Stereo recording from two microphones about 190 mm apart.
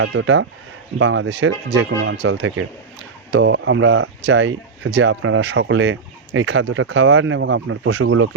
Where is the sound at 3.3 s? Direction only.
80° right.